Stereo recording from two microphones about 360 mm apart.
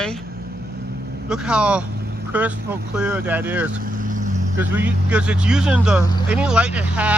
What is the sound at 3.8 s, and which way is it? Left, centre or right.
Vehicle, right.